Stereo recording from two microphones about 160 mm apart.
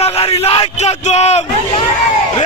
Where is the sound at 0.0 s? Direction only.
40° left (ahead or behind).